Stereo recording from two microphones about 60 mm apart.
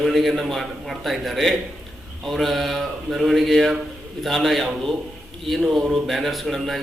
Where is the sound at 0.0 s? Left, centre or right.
Centre.